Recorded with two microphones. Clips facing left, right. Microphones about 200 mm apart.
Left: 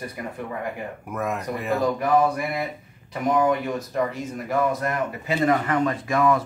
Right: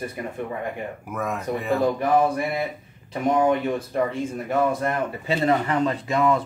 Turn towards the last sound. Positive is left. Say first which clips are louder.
# even
turn(degrees=-25)  # may be behind; listen again after turning